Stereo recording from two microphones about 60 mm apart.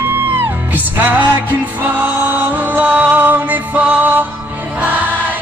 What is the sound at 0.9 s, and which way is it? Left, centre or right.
Speech, right.